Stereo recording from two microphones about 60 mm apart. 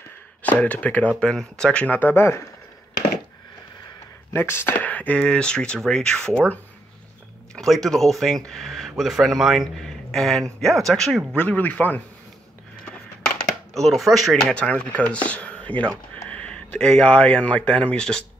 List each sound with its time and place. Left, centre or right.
0.4 s speech: left
2.0 s speech: left
4.3 s speech: left
4.8 s a sound: left
5.2 s speech: centre
7.6 s speech: centre
9.8 s speech: centre
11.3 s speech: left
13.7 s speech: centre
14.5 s speech: centre